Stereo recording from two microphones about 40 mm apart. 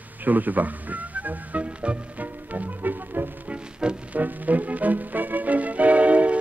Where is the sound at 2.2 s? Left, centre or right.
Right.